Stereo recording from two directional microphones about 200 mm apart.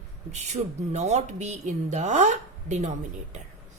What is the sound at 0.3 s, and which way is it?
Speech, 35° right (ahead or behind).